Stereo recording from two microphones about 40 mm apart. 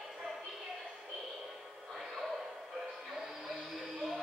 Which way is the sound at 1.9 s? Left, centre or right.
Centre.